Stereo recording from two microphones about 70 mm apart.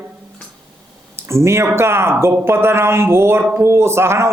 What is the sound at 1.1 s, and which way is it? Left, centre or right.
Speech, right.